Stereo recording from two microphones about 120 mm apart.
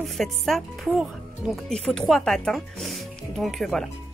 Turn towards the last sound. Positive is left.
turn(degrees=0)  # may be behind; listen again after turning